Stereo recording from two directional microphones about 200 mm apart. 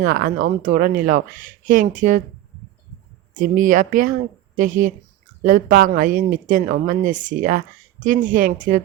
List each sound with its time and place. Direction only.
0.0 s speech: 40° right (ahead or behind)
3.3 s speech: 40° right (ahead or behind)